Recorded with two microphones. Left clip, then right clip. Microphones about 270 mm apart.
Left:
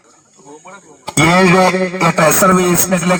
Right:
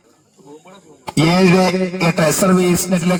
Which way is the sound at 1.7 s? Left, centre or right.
Centre.